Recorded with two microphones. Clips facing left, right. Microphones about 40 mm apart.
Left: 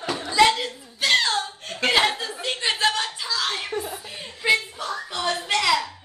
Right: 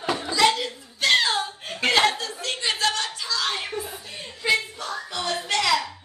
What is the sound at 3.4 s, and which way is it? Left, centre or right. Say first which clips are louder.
Chuckle: right 1 dB; centre.